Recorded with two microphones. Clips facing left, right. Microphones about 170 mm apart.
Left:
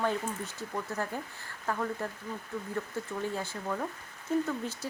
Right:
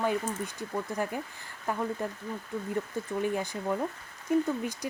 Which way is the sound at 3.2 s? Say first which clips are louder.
Right 6 dB; 15° right (ahead or behind).